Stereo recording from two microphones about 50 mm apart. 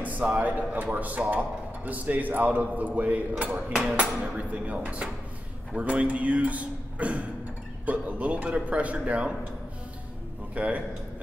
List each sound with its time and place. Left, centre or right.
0.0 s a man's voice: right
10.5 s a man's voice: right